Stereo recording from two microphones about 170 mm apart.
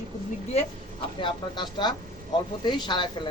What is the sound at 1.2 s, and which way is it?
Speech, 25° left (ahead or behind).